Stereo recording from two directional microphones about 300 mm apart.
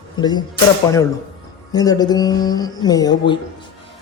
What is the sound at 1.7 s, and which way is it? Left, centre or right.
A man's voice, centre.